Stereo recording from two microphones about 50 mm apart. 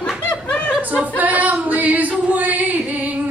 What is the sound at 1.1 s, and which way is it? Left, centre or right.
A woman's voice, right.